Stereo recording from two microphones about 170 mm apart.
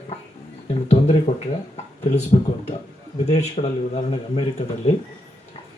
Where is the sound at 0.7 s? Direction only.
35° left (ahead or behind).